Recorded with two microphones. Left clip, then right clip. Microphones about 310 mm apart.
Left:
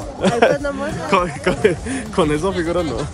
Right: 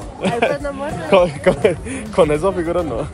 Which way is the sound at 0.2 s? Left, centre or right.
Centre.